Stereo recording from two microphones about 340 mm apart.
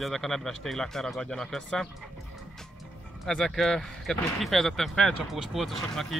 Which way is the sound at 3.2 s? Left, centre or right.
Centre.